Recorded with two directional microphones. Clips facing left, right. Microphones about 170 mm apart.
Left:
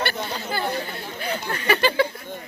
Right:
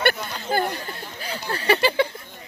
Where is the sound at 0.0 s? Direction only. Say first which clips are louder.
Right 3 dB; 55° right (ahead or behind).